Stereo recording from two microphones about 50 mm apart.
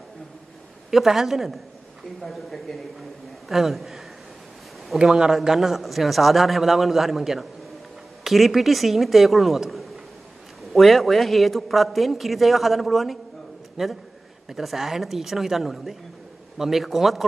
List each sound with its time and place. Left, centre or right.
0.8 s a woman's voice: centre
4.9 s a woman's voice: centre